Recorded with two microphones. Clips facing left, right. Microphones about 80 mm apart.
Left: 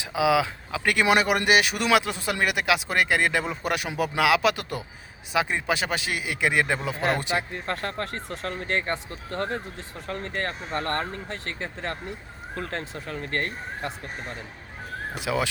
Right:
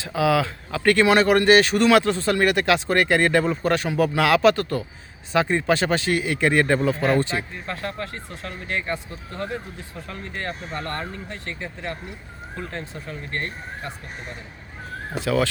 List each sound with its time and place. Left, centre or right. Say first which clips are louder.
0.0 s speech: right 1 dB; centre
7.5 s speech: left 1 dB; left
15.1 s speech: right 5 dB; centre